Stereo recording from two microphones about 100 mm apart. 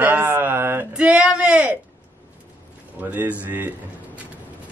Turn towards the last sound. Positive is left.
turn(degrees=-15)  # may be behind; listen again after turning